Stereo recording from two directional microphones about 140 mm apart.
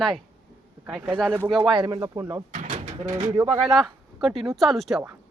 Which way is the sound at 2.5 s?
65° right (ahead or behind).